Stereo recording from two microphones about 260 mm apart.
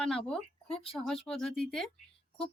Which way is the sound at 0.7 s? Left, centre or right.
Left.